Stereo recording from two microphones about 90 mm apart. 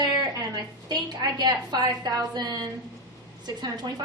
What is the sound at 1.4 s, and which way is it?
A woman's voice, 55° right (ahead or behind).